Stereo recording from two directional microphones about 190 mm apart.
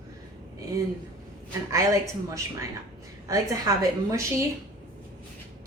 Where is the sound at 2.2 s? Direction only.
15° right (ahead or behind).